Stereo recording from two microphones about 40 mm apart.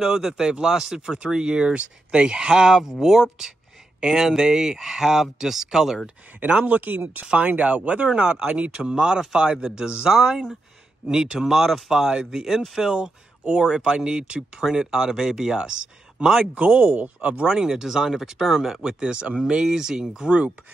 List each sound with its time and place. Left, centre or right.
0.0 s speech: centre
6.6 s speech: right
8.1 s speech: right
16.5 s speech: right
17.5 s speech: centre
18.9 s speech: right
20.2 s speech: right